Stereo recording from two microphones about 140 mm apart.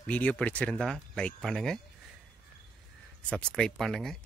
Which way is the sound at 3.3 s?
5° left (ahead or behind).